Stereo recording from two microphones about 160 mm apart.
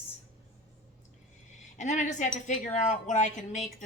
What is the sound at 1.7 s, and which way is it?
Speech, 50° left (ahead or behind).